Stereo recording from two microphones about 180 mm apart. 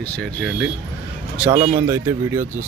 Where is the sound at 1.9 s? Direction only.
15° right (ahead or behind).